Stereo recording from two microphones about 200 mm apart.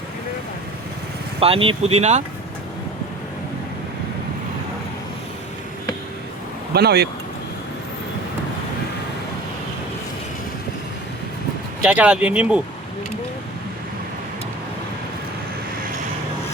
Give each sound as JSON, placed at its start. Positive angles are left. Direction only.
{"t": 1.4, "sound": "speech", "side_deg": -30}
{"t": 6.7, "sound": "speech", "side_deg": -55}
{"t": 11.8, "sound": "speech", "side_deg": -5}